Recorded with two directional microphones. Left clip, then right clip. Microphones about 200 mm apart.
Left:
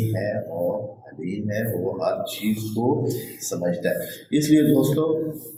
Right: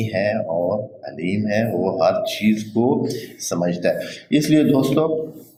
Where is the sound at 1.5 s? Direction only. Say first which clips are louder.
Right 6 dB; 40° right (ahead or behind).